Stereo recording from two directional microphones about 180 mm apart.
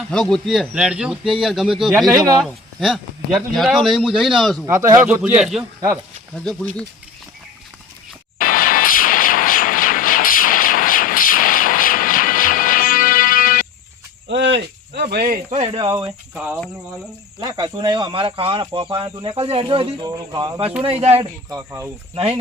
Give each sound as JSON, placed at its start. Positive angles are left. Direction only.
{"t": 0.1, "sound": "speech", "side_deg": 5}
{"t": 4.6, "sound": "speech", "side_deg": -20}
{"t": 8.4, "sound": "a sound", "side_deg": 50}
{"t": 14.3, "sound": "cricket", "side_deg": -80}
{"t": 15.6, "sound": "speech", "side_deg": -25}
{"t": 16.3, "sound": "speech", "side_deg": -5}
{"t": 17.4, "sound": "speech", "side_deg": -20}
{"t": 20.8, "sound": "speech", "side_deg": -35}
{"t": 21.5, "sound": "speech", "side_deg": -15}
{"t": 22.1, "sound": "speech", "side_deg": -30}